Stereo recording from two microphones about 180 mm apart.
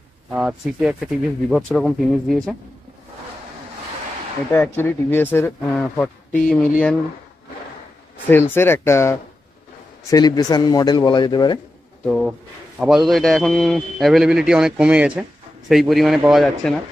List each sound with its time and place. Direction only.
0.3 s a man's voice: centre (ahead or behind)
4.5 s speech: 10° left (ahead or behind)
8.3 s speech: 10° left (ahead or behind)
12.0 s a man's voice: centre (ahead or behind)